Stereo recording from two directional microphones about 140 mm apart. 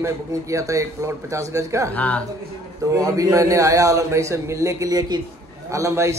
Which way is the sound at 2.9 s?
25° right (ahead or behind).